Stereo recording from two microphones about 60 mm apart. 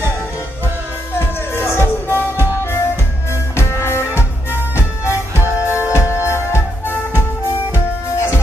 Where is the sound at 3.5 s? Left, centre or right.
Left.